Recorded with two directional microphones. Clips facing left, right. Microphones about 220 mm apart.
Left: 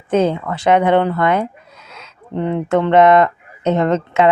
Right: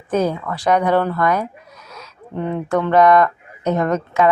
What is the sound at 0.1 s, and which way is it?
Speech, 25° left (ahead or behind).